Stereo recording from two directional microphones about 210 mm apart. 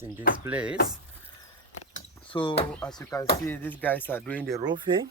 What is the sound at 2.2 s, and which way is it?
Speech, 25° left (ahead or behind).